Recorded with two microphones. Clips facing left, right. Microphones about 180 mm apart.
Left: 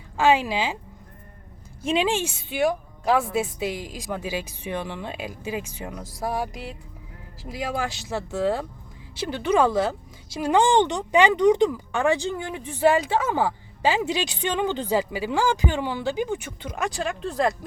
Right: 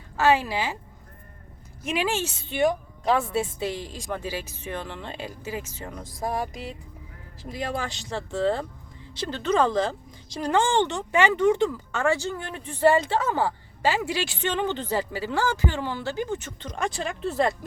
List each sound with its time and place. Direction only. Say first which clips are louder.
0.2 s speech: left 2 dB; 15° left (ahead or behind)
1.8 s a woman's voice: left 4 dB; 25° left (ahead or behind)
2.0 s speech: left 2 dB; 15° left (ahead or behind)